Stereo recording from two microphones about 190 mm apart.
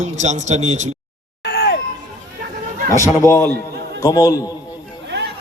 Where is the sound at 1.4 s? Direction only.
60° left (ahead or behind).